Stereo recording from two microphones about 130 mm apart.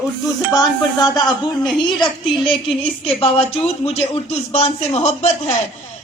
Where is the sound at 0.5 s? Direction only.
30° left (ahead or behind).